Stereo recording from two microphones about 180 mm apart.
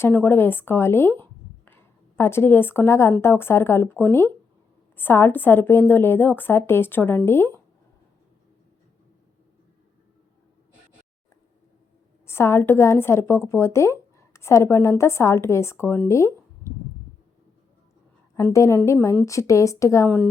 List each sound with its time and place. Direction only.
0.0 s a woman's voice: 10° left (ahead or behind)
12.2 s a woman's voice: 15° left (ahead or behind)
18.3 s a woman's voice: 15° left (ahead or behind)